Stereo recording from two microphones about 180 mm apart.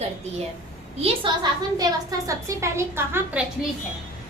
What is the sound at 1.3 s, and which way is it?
Speech, 25° right (ahead or behind).